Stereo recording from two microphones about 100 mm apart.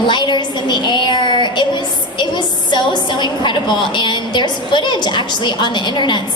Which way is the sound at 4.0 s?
50° left (ahead or behind).